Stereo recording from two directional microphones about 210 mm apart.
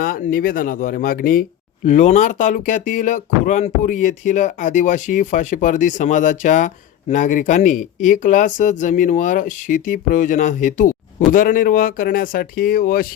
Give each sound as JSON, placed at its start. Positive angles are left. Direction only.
{"t": 0.0, "sound": "speech", "side_deg": 40}